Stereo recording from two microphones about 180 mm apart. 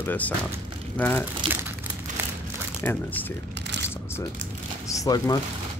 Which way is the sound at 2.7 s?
10° left (ahead or behind).